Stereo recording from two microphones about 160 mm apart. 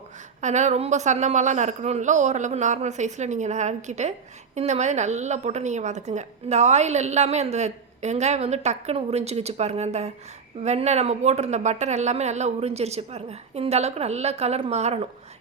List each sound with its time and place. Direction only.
0.4 s a woman's voice: 45° right (ahead or behind)